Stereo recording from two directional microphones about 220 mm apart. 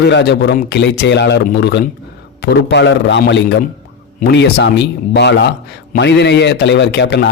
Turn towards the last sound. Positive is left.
turn(degrees=50)  # may be behind; listen again after turning